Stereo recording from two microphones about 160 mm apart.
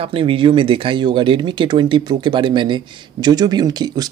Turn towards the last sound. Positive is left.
turn(degrees=-25)  # may be behind; listen again after turning